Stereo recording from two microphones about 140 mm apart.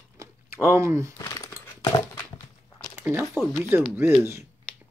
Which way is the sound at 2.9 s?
20° right (ahead or behind).